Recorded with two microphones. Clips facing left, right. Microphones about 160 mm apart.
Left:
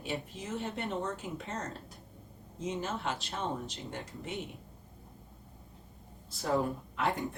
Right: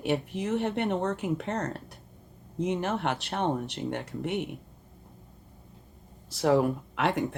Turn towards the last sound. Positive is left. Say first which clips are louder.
# right 5 dB
turn(degrees=-85)